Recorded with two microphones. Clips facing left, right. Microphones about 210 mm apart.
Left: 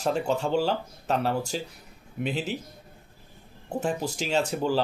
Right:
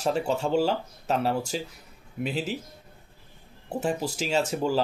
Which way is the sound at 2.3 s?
40° right (ahead or behind).